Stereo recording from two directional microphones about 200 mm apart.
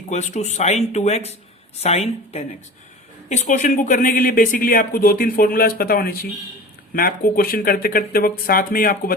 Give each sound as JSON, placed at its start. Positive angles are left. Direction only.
{"t": 0.1, "sound": "speech", "side_deg": 35}